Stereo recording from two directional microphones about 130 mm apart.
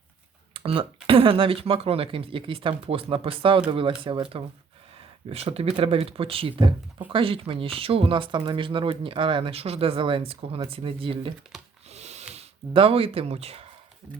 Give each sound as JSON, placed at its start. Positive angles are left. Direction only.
{"t": 0.5, "sound": "a sound", "side_deg": -45}
{"t": 1.0, "sound": "speech", "side_deg": -45}
{"t": 11.9, "sound": "snort", "side_deg": -55}
{"t": 12.3, "sound": "speech", "side_deg": -50}